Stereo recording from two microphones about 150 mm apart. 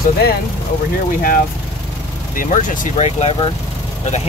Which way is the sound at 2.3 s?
60° left (ahead or behind).